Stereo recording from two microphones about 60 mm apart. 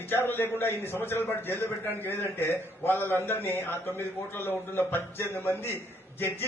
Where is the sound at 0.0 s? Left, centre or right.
Left.